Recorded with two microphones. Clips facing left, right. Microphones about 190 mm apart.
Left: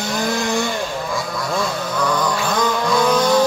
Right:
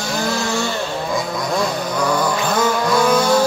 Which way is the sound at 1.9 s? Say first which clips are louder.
Right 1 dB; 10° right (ahead or behind).